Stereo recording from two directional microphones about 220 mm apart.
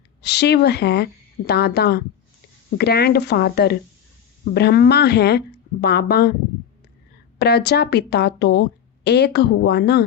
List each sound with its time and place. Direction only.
0.2 s speech: 50° left (ahead or behind)
7.3 s speech: 50° left (ahead or behind)